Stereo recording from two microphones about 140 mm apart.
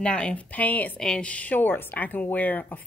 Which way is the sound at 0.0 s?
10° left (ahead or behind).